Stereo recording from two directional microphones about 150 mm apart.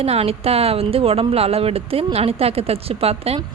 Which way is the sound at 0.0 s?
40° right (ahead or behind).